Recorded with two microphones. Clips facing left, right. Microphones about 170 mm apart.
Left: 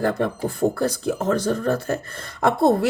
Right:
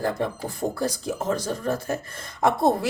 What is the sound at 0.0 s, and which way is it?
Speech, 60° left (ahead or behind).